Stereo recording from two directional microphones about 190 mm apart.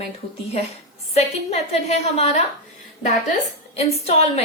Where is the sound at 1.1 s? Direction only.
35° left (ahead or behind).